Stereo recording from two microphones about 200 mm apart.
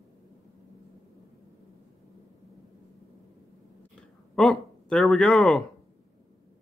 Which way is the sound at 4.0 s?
5° left (ahead or behind).